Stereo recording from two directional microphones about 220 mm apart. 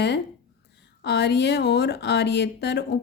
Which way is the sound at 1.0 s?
50° left (ahead or behind).